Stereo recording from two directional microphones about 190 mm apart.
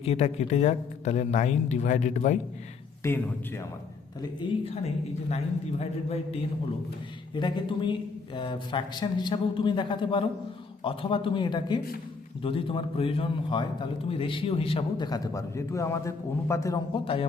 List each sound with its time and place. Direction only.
0.0 s speech: 35° left (ahead or behind)
3.0 s a man's voice: 15° left (ahead or behind)
4.2 s a man's voice: 25° left (ahead or behind)